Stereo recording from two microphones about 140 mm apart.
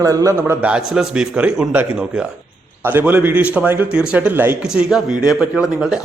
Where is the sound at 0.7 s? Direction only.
5° right (ahead or behind).